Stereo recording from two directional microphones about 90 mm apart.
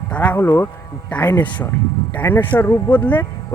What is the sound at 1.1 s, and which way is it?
Speech, 15° left (ahead or behind).